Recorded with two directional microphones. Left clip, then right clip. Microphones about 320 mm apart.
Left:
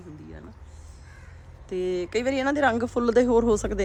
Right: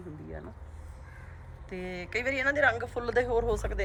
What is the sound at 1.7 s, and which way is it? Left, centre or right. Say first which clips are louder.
Speech: left 9 dB; centre.